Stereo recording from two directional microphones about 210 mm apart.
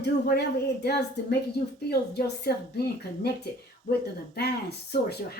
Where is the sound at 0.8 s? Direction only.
50° left (ahead or behind).